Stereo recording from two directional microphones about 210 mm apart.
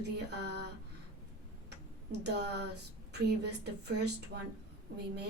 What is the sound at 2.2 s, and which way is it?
Speech, 55° right (ahead or behind).